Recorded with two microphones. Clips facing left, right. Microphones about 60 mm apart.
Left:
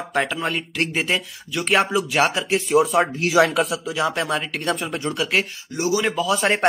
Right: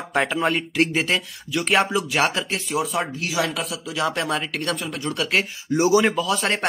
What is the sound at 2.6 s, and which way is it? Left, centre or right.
Speech, left.